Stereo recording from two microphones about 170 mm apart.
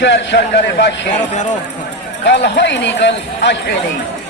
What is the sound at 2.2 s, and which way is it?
A man's voice, 90° left.